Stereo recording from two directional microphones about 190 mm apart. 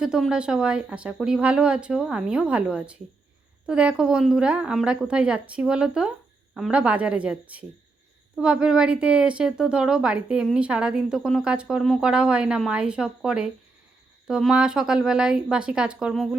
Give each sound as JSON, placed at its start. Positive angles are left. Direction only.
{"t": 0.0, "sound": "a woman's voice", "side_deg": -5}